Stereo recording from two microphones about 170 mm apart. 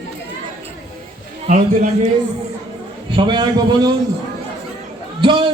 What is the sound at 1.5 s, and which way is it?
Speech, 45° right (ahead or behind).